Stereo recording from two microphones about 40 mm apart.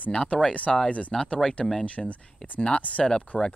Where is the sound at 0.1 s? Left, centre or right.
Left.